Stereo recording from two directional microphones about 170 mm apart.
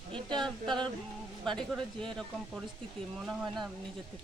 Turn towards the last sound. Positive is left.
turn(degrees=-5)  # may be behind; listen again after turning